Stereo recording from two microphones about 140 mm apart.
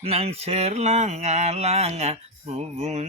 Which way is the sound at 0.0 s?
45° right (ahead or behind).